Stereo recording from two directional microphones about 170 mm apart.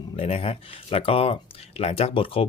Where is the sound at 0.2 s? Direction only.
35° left (ahead or behind).